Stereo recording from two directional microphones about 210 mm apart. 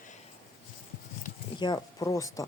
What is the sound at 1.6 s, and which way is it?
Speech, 20° left (ahead or behind).